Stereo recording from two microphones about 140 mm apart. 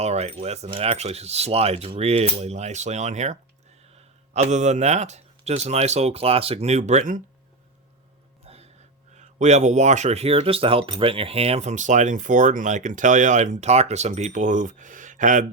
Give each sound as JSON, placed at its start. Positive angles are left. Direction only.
{"t": 0.0, "sound": "a man's voice", "side_deg": -50}
{"t": 8.4, "sound": "a sound", "side_deg": -50}
{"t": 9.1, "sound": "speech", "side_deg": -55}